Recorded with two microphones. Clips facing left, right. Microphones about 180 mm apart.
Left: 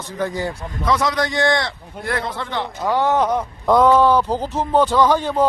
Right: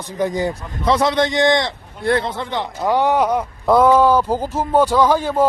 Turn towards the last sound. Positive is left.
turn(degrees=-10)  # may be behind; listen again after turning